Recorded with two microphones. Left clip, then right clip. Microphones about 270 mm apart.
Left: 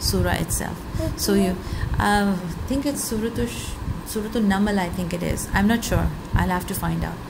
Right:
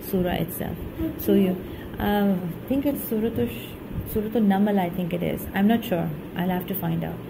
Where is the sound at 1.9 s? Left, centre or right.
Centre.